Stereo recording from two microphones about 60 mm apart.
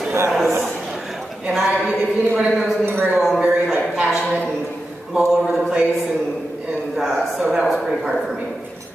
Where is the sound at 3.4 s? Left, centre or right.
Centre.